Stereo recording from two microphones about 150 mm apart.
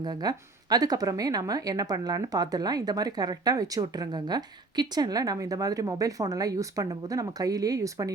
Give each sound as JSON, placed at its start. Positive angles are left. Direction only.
{"t": 0.0, "sound": "speech", "side_deg": -25}